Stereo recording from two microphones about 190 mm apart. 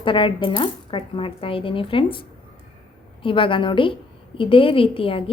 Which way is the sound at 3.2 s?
25° left (ahead or behind).